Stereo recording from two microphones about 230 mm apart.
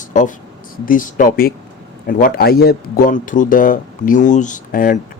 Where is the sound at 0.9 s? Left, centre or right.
Left.